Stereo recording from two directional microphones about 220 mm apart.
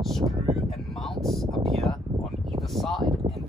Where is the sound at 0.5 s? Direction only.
Centre (ahead or behind).